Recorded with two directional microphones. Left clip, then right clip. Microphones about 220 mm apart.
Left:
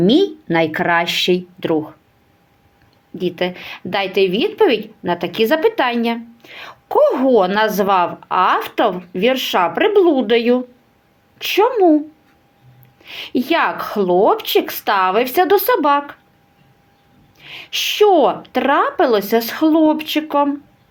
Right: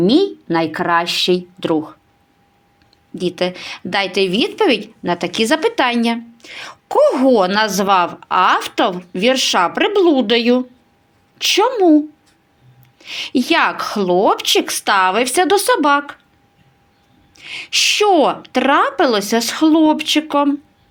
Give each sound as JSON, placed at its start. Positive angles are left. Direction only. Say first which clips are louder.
{"t": 0.0, "sound": "a woman's voice", "louder": "even", "side_deg": 0}
{"t": 3.2, "sound": "a woman's voice", "louder": "right 1 dB", "side_deg": -20}
{"t": 17.3, "sound": "a woman's voice", "louder": "right 5 dB", "side_deg": -20}